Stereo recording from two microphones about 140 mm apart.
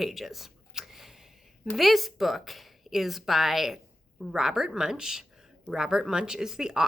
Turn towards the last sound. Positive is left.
turn(degrees=-5)  # may be behind; listen again after turning